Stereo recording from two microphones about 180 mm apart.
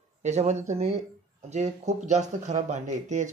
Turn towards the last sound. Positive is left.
turn(degrees=-40)  # may be behind; listen again after turning